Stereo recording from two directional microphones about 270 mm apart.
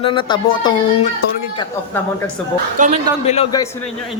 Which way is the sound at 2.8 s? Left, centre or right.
Right.